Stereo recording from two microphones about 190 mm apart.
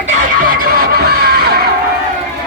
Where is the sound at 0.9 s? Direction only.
55° right (ahead or behind).